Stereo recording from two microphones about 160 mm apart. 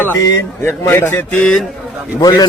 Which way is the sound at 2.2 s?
25° left (ahead or behind).